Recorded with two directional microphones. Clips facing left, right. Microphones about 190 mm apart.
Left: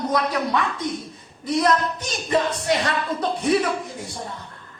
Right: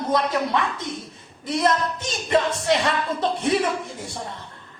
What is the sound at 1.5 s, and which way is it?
Speech, 25° right (ahead or behind).